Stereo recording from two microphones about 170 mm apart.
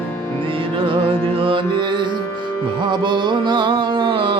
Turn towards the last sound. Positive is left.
turn(degrees=-30)  # may be behind; listen again after turning